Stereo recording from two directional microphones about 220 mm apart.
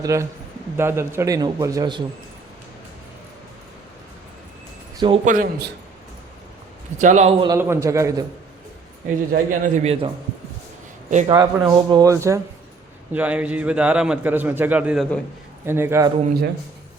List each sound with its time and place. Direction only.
0.0 s a man's voice: 15° right (ahead or behind)
4.9 s speech: 25° right (ahead or behind)
5.2 s a man's voice: 35° right (ahead or behind)
7.0 s a man's voice: 30° right (ahead or behind)
7.4 s a man's voice: 15° right (ahead or behind)
9.3 s a man's voice: 35° right (ahead or behind)
11.3 s a man's voice: 15° right (ahead or behind)